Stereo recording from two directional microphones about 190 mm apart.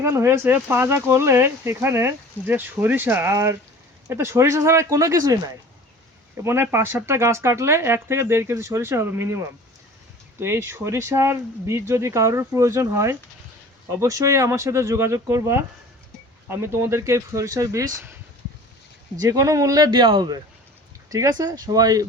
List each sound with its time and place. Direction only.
0.0 s speech: 15° right (ahead or behind)
6.4 s speech: 15° right (ahead or behind)
19.2 s speech: 15° right (ahead or behind)